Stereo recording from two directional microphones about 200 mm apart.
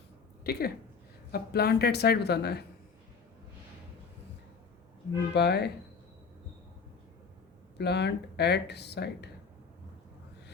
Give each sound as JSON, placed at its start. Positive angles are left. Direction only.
{"t": 0.4, "sound": "speech", "side_deg": 50}
{"t": 5.3, "sound": "speech", "side_deg": 55}
{"t": 7.8, "sound": "speech", "side_deg": 55}